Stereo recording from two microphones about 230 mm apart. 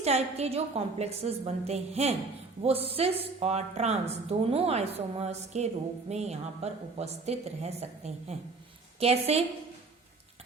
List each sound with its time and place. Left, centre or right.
0.0 s a woman's voice: right